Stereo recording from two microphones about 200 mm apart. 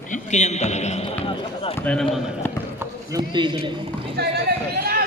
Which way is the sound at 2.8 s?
20° right (ahead or behind).